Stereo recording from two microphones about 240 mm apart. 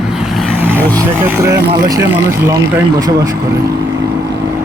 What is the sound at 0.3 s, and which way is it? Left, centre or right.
Vehicle, centre.